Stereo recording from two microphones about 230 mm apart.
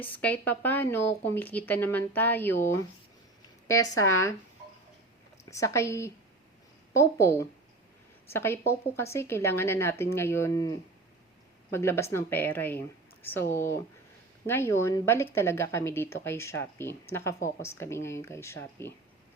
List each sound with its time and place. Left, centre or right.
0.0 s speech: centre
5.5 s speech: centre